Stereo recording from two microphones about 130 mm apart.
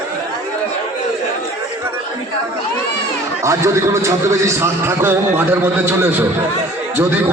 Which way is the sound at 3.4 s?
20° right (ahead or behind).